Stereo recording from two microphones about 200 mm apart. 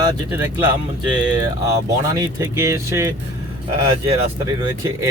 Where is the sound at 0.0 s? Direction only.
15° right (ahead or behind).